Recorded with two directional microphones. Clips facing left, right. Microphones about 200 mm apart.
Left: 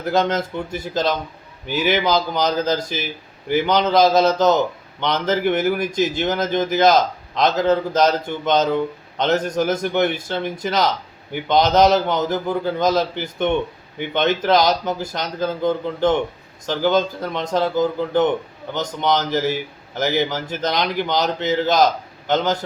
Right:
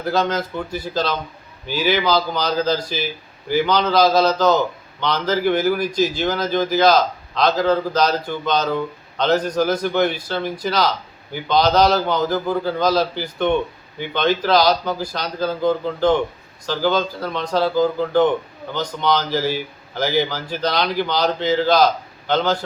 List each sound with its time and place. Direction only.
0.1 s a man's voice: 25° left (ahead or behind)